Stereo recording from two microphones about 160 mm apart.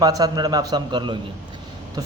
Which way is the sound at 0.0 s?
25° right (ahead or behind).